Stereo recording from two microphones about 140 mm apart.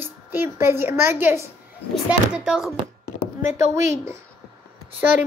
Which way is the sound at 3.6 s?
20° right (ahead or behind).